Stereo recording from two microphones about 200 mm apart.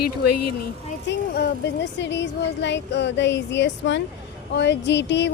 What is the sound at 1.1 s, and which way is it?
Speech, 60° left (ahead or behind).